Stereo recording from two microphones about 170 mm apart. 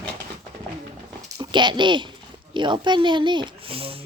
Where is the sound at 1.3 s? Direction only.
25° right (ahead or behind).